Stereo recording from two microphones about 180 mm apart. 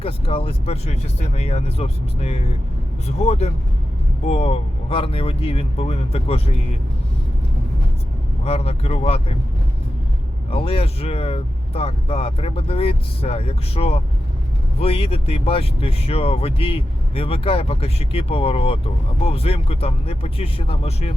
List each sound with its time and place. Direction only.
0.0 s speech: 30° left (ahead or behind)
8.4 s speech: 35° left (ahead or behind)
10.5 s speech: 30° left (ahead or behind)